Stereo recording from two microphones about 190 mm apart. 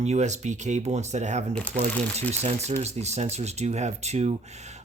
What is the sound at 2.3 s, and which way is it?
Speech, 35° right (ahead or behind).